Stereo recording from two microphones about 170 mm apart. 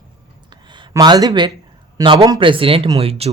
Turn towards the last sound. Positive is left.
turn(degrees=-35)  # may be behind; listen again after turning